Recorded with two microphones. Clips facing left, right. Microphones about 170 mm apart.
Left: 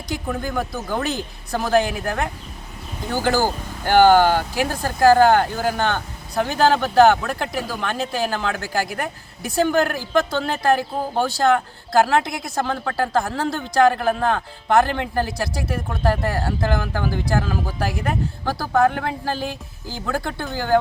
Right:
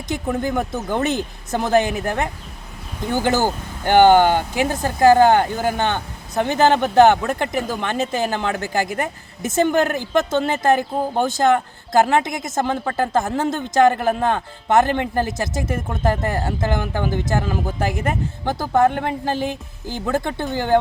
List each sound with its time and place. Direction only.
0.1 s speech: 20° right (ahead or behind)